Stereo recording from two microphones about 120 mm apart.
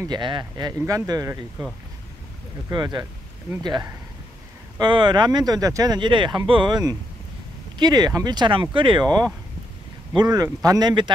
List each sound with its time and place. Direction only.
0.0 s speech: 40° right (ahead or behind)
2.7 s speech: 35° right (ahead or behind)